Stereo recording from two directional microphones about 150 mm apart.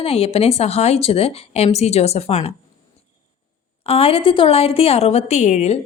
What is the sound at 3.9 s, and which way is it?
A woman's voice, 40° left (ahead or behind).